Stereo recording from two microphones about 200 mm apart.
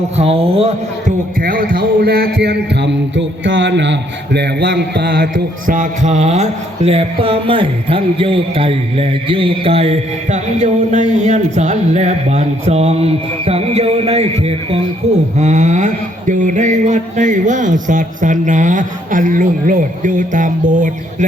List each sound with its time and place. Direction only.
0.2 s speech: 30° right (ahead or behind)
1.4 s a man's voice: 45° right (ahead or behind)